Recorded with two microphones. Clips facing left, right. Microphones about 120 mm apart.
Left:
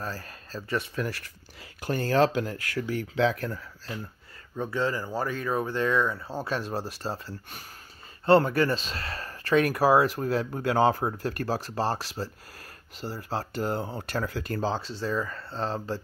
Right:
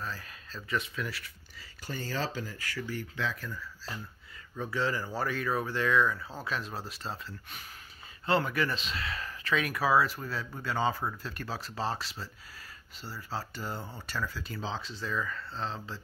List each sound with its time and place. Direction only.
0.0 s speech: 40° left (ahead or behind)
1.6 s speech: 60° left (ahead or behind)
4.8 s speech: 20° left (ahead or behind); by 14.8 s 50° left (ahead or behind)
14.9 s speech: 30° left (ahead or behind)